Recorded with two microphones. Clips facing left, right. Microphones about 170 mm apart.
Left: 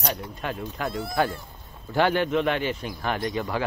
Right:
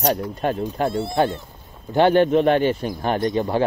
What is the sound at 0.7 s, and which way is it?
A man's voice, 30° right (ahead or behind).